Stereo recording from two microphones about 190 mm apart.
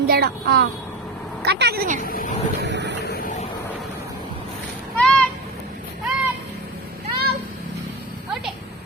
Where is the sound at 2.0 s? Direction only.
50° left (ahead or behind).